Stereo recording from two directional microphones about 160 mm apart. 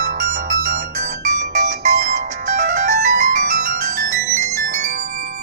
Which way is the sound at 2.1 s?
50° right (ahead or behind).